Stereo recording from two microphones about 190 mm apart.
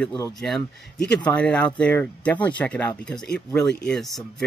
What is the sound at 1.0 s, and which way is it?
Speech, 5° left (ahead or behind).